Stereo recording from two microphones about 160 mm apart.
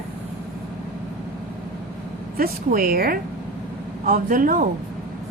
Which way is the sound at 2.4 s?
65° right (ahead or behind).